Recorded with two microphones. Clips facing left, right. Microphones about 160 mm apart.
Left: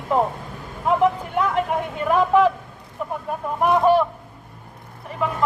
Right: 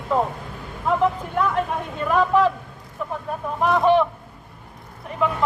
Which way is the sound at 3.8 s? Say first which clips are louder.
Right 1 dB; 5° left (ahead or behind).